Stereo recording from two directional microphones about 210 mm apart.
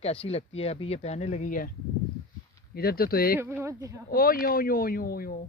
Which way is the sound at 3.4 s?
10° right (ahead or behind).